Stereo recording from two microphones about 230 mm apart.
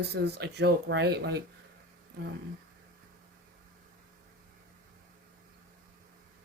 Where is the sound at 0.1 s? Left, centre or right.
Right.